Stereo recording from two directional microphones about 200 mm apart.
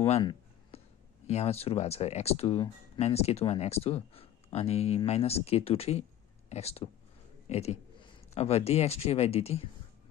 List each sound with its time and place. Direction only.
0.0 s speech: 25° left (ahead or behind)